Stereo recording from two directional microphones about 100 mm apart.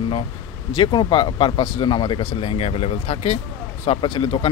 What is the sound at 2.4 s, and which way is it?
Speech, 90° left.